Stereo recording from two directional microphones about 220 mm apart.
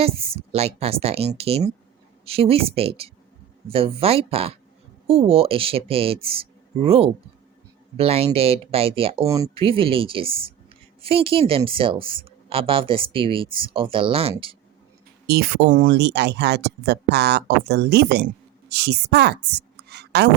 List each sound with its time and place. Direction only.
0.0 s speech: 25° right (ahead or behind)
9.2 s speech: 15° right (ahead or behind)
9.6 s speech: 25° right (ahead or behind)
15.3 s a woman's voice: 45° right (ahead or behind)